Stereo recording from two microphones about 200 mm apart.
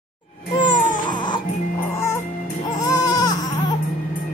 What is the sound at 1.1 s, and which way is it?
Music, 25° left (ahead or behind).